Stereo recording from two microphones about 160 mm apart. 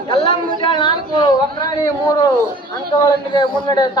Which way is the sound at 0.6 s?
30° left (ahead or behind).